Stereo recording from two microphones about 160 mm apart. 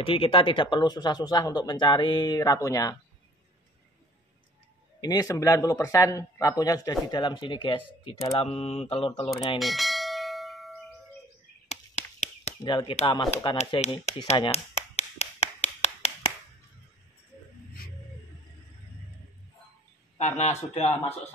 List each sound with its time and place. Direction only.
0.0 s speech: 35° left (ahead or behind)
5.0 s speech: 25° left (ahead or behind)
9.6 s bell: centre (ahead or behind)
11.7 s a sound: 40° left (ahead or behind)
12.6 s a man's voice: 30° left (ahead or behind)
14.5 s tap: 40° left (ahead or behind)
20.2 s a man's voice: 45° left (ahead or behind)